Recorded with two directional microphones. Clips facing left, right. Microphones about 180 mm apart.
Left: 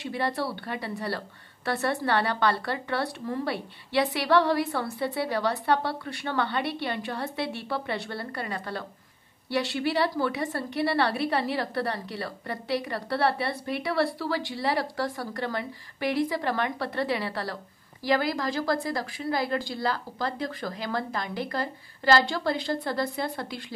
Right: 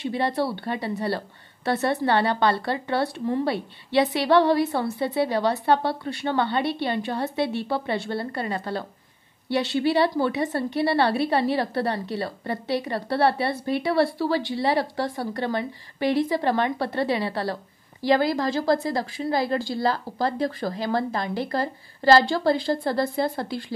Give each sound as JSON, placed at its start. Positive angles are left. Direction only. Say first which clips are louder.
{"t": 0.0, "sound": "a woman's voice", "louder": "right 5 dB", "side_deg": -25}